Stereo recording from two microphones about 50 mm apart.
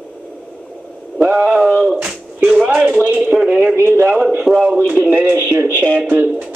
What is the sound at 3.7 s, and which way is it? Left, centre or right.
Speech, right.